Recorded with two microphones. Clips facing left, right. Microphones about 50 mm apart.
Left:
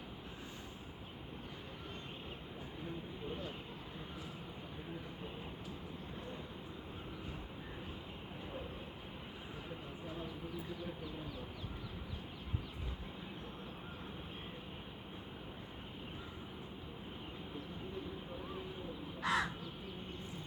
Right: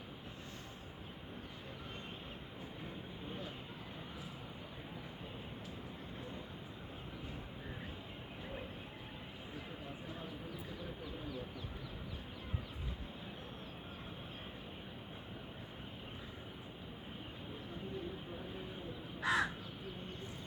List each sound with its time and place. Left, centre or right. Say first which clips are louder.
19.2 s crow: right 1 dB; centre